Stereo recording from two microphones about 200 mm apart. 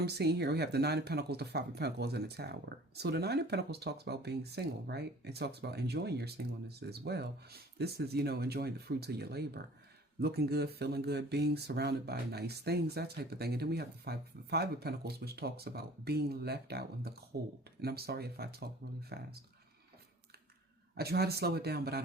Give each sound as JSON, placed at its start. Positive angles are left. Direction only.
{"t": 0.0, "sound": "speech", "side_deg": -55}
{"t": 20.9, "sound": "speech", "side_deg": -50}